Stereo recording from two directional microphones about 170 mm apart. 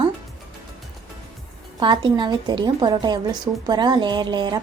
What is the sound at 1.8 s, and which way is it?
A woman's voice, 25° right (ahead or behind).